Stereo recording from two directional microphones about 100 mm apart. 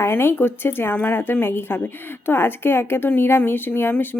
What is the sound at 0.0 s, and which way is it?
Speech, 25° left (ahead or behind).